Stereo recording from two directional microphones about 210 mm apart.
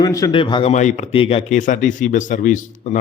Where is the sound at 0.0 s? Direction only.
15° left (ahead or behind).